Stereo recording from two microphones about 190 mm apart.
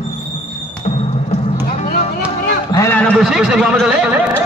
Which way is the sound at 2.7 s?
10° left (ahead or behind).